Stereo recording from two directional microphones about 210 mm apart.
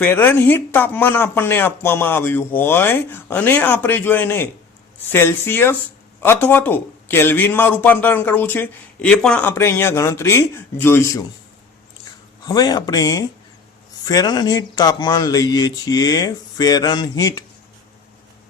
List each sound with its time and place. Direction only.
0.0 s a man's voice: 10° left (ahead or behind)
12.5 s a man's voice: 20° left (ahead or behind)